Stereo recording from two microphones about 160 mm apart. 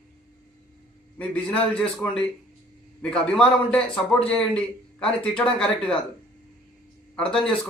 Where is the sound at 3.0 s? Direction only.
5° left (ahead or behind).